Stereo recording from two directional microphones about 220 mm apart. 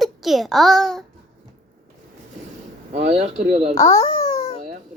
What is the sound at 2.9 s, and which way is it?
Speech, 30° right (ahead or behind).